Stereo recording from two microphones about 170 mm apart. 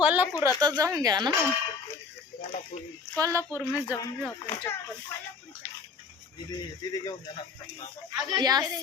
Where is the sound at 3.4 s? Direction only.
15° left (ahead or behind).